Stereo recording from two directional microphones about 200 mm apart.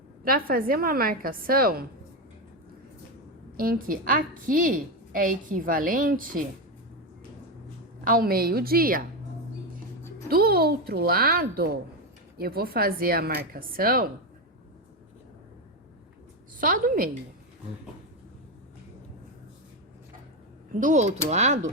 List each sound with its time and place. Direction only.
0.3 s a woman's voice: 45° right (ahead or behind)
3.6 s a woman's voice: 45° right (ahead or behind)
8.0 s a woman's voice: 45° right (ahead or behind)
10.2 s a woman's voice: 50° right (ahead or behind)
16.6 s a woman's voice: 45° right (ahead or behind)
20.7 s speech: 40° right (ahead or behind)